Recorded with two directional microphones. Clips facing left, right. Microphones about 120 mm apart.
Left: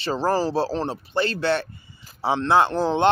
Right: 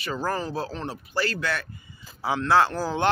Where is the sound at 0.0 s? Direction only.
30° left (ahead or behind).